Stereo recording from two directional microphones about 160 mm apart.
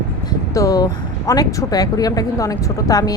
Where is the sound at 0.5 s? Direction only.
20° left (ahead or behind).